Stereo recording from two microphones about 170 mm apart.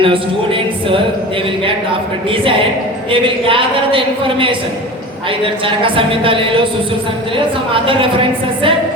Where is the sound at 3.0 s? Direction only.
30° right (ahead or behind).